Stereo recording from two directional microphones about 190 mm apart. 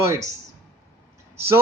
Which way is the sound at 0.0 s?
15° right (ahead or behind).